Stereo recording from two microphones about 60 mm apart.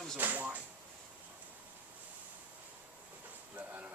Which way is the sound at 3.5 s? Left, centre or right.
Right.